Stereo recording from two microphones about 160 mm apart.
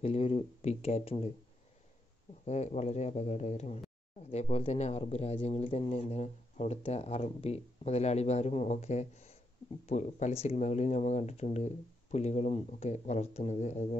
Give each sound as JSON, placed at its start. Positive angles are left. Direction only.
{"t": 0.0, "sound": "speech", "side_deg": 40}
{"t": 2.4, "sound": "speech", "side_deg": 45}